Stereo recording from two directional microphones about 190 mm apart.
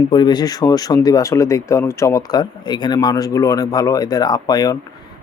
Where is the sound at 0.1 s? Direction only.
25° left (ahead or behind).